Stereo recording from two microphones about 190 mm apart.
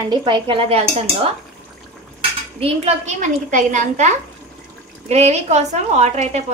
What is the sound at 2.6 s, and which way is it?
A woman's voice, 40° right (ahead or behind).